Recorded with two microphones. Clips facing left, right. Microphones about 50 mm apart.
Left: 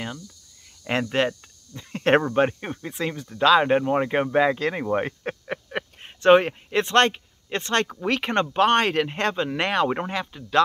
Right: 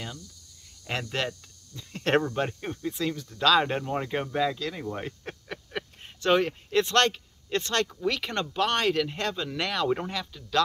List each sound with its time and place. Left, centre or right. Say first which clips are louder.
0.8 s speech: left 8 dB; left